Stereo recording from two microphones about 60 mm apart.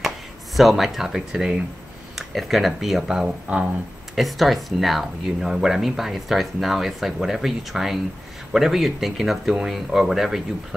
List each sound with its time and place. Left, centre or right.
0.6 s speech: centre
3.5 s a sound: right
4.1 s speech: centre